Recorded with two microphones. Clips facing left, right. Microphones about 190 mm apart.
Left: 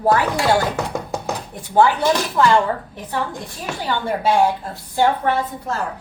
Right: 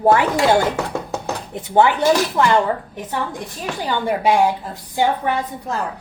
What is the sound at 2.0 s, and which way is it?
Speech, 10° right (ahead or behind).